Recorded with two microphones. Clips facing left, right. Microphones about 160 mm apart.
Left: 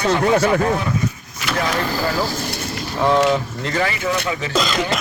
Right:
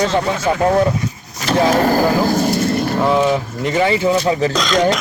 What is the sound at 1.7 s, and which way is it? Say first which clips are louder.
Speech: right 9 dB; 45° right (ahead or behind).